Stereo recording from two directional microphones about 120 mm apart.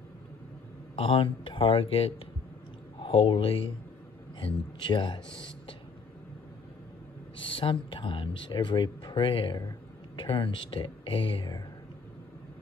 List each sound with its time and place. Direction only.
0.9 s speech: 50° left (ahead or behind)
7.3 s speech: 45° left (ahead or behind)